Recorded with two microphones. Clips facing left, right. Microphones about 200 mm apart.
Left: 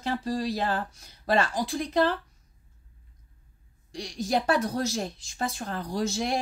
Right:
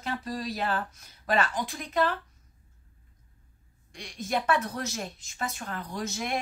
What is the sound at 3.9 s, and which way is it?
Speech, 35° left (ahead or behind).